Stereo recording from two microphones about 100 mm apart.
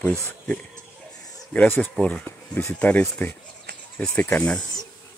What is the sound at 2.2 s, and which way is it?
Speech, 25° left (ahead or behind).